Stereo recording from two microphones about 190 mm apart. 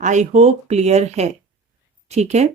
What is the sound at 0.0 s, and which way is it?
Speech, 40° right (ahead or behind).